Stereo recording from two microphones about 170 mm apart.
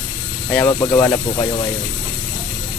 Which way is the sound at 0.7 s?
20° left (ahead or behind).